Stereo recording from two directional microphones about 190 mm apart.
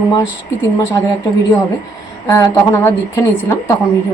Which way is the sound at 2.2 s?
15° left (ahead or behind).